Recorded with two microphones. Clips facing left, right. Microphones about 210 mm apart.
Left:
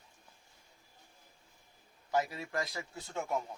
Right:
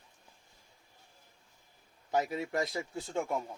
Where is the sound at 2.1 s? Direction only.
20° right (ahead or behind).